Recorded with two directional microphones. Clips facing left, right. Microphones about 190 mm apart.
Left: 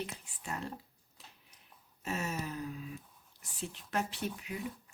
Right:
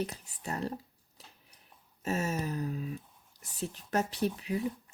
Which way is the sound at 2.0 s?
40° right (ahead or behind).